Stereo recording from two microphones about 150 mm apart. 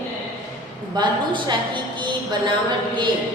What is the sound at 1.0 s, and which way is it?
Speech, 30° right (ahead or behind).